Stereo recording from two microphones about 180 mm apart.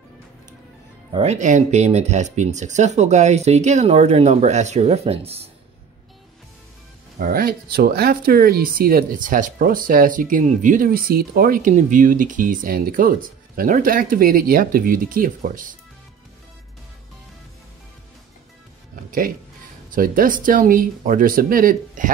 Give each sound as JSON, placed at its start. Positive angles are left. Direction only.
{"t": 1.1, "sound": "speech", "side_deg": -35}
{"t": 7.2, "sound": "speech", "side_deg": -55}
{"t": 19.0, "sound": "speech", "side_deg": -50}